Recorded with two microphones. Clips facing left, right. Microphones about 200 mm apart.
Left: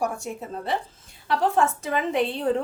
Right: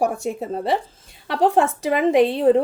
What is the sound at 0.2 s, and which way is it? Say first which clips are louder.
A woman's voice: right 8 dB; 85° right.